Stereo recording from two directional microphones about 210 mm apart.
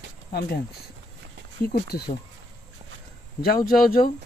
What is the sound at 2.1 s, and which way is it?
Speech, 30° left (ahead or behind).